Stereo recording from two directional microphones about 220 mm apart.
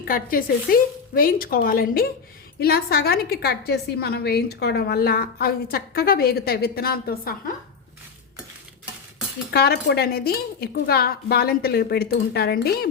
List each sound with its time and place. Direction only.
0.0 s a woman's voice: 40° left (ahead or behind)
9.5 s a woman's voice: 45° left (ahead or behind)